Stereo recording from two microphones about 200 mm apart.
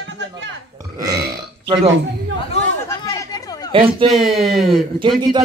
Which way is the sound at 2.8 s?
15° left (ahead or behind).